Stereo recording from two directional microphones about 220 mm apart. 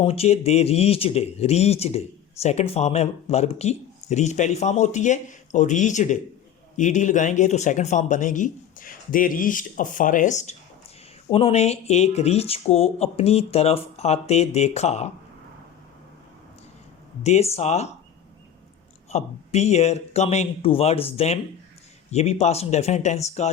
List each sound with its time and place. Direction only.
0.0 s speech: 25° left (ahead or behind)
17.2 s speech: 30° left (ahead or behind)
19.1 s speech: 30° left (ahead or behind)